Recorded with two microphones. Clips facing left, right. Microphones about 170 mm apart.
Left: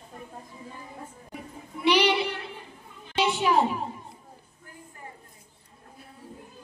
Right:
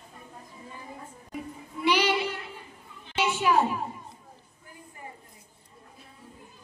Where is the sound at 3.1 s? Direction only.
15° left (ahead or behind).